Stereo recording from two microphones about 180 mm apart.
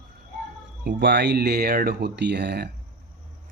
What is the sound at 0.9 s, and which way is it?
Speech, 65° right (ahead or behind).